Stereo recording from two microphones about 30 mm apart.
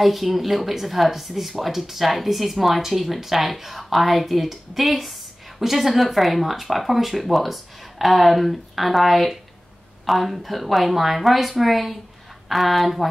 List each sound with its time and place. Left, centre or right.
0.0 s speech: centre